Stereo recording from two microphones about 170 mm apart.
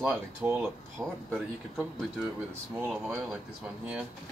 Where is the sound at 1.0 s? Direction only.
20° right (ahead or behind).